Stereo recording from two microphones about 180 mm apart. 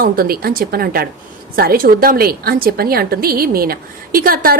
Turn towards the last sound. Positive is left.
turn(degrees=-55)  # may be behind; listen again after turning